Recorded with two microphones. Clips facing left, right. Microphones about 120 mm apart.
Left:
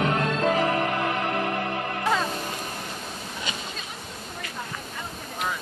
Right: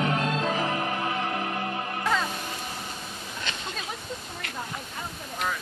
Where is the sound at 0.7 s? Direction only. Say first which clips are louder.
Left 4 dB; 80° left.